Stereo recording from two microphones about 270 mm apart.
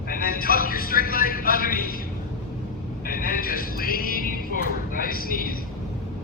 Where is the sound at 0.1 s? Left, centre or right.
Left.